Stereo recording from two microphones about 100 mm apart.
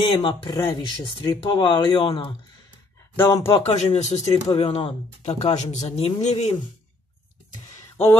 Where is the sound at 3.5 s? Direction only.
75° left (ahead or behind).